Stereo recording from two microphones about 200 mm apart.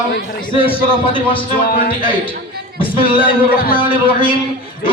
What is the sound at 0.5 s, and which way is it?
Speech, 25° left (ahead or behind).